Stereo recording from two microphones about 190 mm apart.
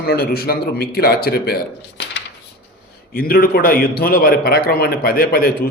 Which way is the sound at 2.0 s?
65° left (ahead or behind).